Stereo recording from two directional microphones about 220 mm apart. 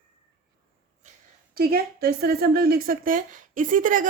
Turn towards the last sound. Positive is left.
turn(degrees=-35)  # may be behind; listen again after turning